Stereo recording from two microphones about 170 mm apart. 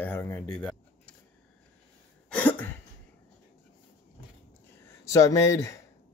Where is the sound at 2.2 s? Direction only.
10° left (ahead or behind).